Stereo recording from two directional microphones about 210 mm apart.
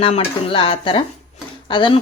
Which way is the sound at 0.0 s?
25° left (ahead or behind).